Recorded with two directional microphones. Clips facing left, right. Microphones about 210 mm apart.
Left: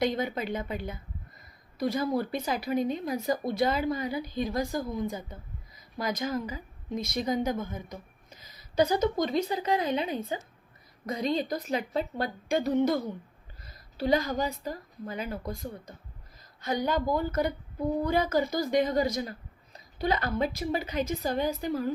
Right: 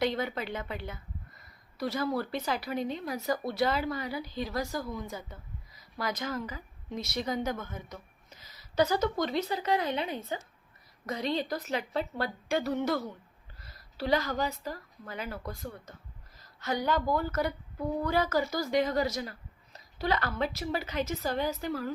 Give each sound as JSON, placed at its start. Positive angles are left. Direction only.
{"t": 0.0, "sound": "speech", "side_deg": 15}
{"t": 1.8, "sound": "a woman's voice", "side_deg": 15}
{"t": 11.3, "sound": "speech", "side_deg": 15}